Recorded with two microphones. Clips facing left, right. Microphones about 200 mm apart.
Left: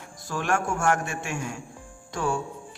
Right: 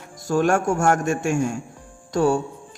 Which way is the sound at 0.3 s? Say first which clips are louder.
Right 8 dB; 45° right (ahead or behind).